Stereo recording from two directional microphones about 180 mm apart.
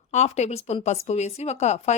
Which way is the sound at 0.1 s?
40° left (ahead or behind).